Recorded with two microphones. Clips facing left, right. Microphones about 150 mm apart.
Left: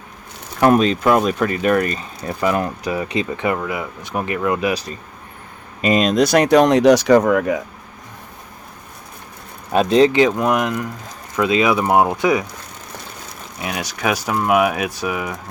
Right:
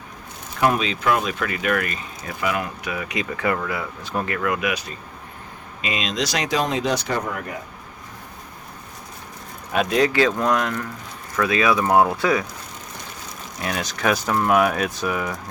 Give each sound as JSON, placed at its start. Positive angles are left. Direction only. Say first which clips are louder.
{"t": 0.6, "sound": "speech", "louder": "left 7 dB", "side_deg": 45}
{"t": 5.8, "sound": "speech", "louder": "left 10 dB", "side_deg": 45}
{"t": 9.7, "sound": "speech", "louder": "left 6 dB", "side_deg": 25}
{"t": 13.6, "sound": "speech", "louder": "left 1 dB", "side_deg": 10}